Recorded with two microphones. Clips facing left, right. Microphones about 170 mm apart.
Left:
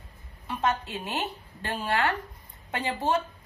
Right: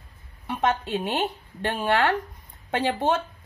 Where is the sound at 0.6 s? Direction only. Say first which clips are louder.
Right 4 dB; 25° right (ahead or behind).